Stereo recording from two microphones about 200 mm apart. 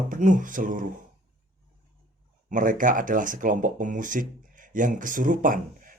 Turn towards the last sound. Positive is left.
turn(degrees=-40)  # may be behind; listen again after turning